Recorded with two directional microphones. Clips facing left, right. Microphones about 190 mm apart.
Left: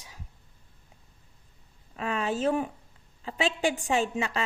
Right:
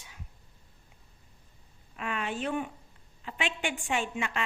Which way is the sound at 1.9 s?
35° left (ahead or behind).